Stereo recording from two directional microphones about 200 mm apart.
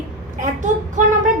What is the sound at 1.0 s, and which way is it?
Speech, 40° right (ahead or behind).